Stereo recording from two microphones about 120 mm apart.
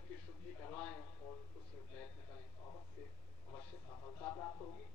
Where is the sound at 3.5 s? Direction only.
20° left (ahead or behind).